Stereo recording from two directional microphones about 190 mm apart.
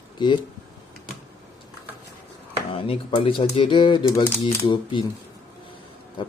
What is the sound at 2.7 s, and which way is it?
Speech, 30° left (ahead or behind).